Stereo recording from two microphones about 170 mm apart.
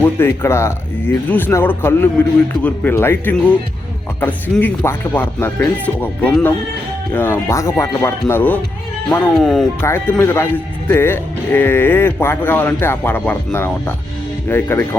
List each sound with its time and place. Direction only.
0.0 s speech: 15° left (ahead or behind)
9.8 s speech: 15° left (ahead or behind)